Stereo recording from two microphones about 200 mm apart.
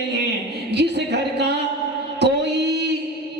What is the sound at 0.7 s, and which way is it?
Speech, 55° right (ahead or behind).